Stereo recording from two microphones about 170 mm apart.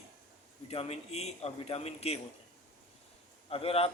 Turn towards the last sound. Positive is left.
turn(degrees=35)  # may be behind; listen again after turning